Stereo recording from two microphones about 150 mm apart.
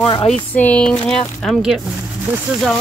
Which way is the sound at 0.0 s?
30° left (ahead or behind).